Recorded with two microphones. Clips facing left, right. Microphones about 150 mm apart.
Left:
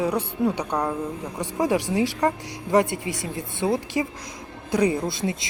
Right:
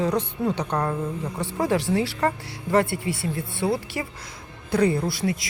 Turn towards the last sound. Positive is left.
turn(degrees=25)  # may be behind; listen again after turning